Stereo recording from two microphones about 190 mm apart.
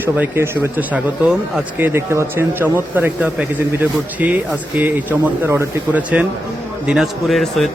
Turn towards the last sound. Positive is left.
turn(degrees=0)  # may be behind; listen again after turning